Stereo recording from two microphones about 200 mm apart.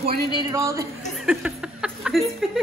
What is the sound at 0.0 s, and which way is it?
Speech, 20° right (ahead or behind).